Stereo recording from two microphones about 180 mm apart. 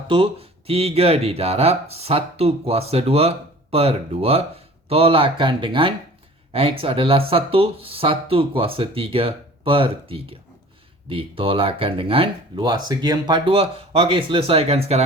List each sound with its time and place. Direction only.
0.1 s speech: 30° right (ahead or behind)